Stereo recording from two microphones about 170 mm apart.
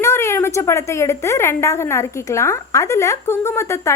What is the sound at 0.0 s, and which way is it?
A woman's voice, 15° left (ahead or behind).